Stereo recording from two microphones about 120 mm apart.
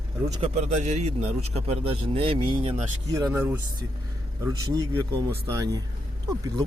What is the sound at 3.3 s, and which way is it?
Speech, 15° right (ahead or behind).